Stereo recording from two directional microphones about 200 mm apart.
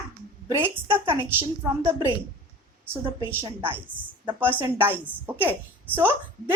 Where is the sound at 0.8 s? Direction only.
25° right (ahead or behind).